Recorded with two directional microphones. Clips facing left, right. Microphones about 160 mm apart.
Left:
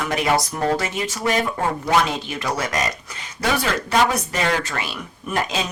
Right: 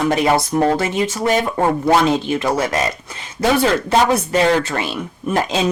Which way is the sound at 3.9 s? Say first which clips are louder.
Right 5 dB; 30° right (ahead or behind).